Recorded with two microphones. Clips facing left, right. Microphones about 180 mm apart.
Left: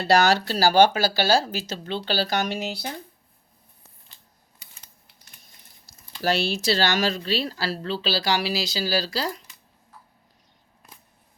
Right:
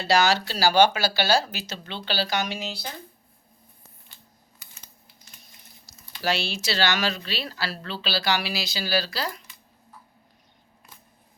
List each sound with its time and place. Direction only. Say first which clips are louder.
0.0 s speech: left 2 dB; 55° left (ahead or behind)
1.5 s speech: left 6 dB; 35° left (ahead or behind)
6.2 s speech: left 4 dB; 45° left (ahead or behind)